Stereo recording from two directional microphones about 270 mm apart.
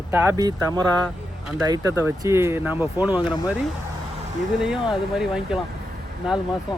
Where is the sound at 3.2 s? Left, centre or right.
Centre.